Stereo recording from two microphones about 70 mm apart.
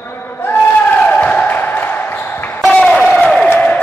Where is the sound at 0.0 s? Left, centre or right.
Left.